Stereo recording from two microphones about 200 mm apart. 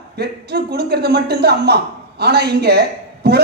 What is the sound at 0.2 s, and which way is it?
A man's voice, 55° right (ahead or behind).